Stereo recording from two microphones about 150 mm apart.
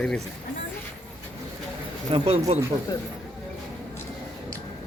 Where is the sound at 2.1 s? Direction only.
40° right (ahead or behind).